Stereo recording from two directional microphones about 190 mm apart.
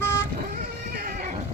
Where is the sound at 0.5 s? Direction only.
50° right (ahead or behind).